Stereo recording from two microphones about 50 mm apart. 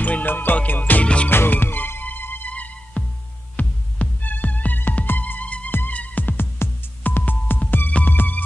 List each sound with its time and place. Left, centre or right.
0.0 s music: left
1.0 s music: left
1.3 s music: left
2.5 s music: left
5.7 s music: left
7.0 s throbbing: left
8.1 s music: left